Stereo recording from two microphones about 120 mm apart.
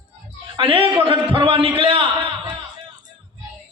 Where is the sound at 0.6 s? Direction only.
50° right (ahead or behind).